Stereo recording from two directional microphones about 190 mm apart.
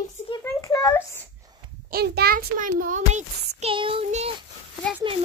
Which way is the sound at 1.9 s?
55° right (ahead or behind).